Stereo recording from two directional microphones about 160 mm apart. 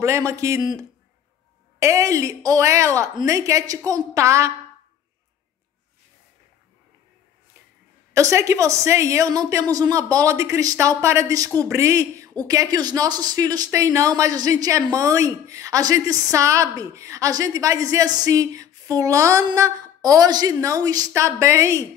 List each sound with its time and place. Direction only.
0.0 s speech: 20° right (ahead or behind)
8.1 s speech: 20° right (ahead or behind)